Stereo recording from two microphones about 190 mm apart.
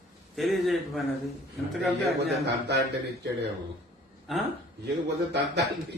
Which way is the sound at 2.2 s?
60° right (ahead or behind).